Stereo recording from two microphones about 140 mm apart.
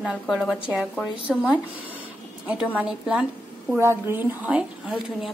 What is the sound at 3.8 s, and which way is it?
Speech, 15° right (ahead or behind).